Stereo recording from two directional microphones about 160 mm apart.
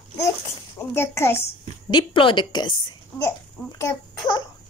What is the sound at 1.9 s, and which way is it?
Speech, 30° left (ahead or behind).